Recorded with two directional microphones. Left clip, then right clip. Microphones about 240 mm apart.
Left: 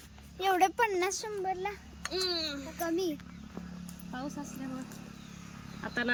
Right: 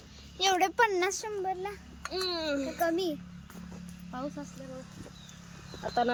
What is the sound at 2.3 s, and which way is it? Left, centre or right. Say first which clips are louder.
Speech: right 3 dB; right.